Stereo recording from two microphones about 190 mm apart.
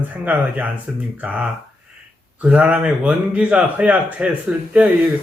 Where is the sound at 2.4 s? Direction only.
5° right (ahead or behind).